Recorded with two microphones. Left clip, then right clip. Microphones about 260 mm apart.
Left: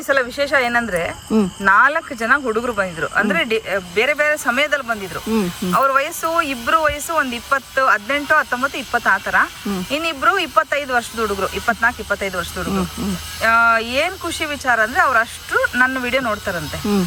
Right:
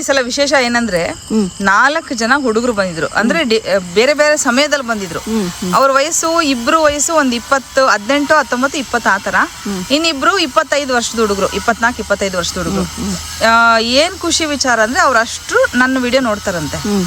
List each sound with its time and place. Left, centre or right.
0.1 s speech: centre